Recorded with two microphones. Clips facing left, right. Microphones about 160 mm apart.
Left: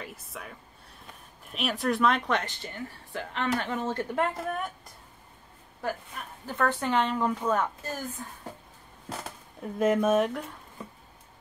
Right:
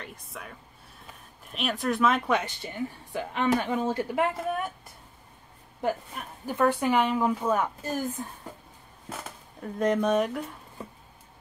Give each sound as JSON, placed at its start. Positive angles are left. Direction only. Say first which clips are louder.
{"t": 0.0, "sound": "speech", "louder": "left 1 dB", "side_deg": 0}
{"t": 5.8, "sound": "speech", "louder": "right 4 dB", "side_deg": -20}
{"t": 9.6, "sound": "speech", "louder": "left 1 dB", "side_deg": 5}